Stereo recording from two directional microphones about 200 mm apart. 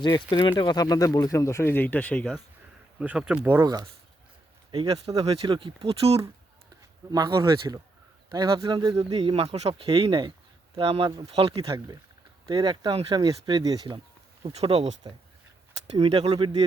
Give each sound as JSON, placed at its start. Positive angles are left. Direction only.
{"t": 0.0, "sound": "speech", "side_deg": 20}
{"t": 3.0, "sound": "speech", "side_deg": -5}
{"t": 4.7, "sound": "speech", "side_deg": -30}
{"t": 7.1, "sound": "speech", "side_deg": -20}
{"t": 16.0, "sound": "speech", "side_deg": -30}